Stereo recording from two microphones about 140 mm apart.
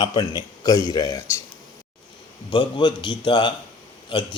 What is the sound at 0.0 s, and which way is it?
A man's voice, 30° left (ahead or behind).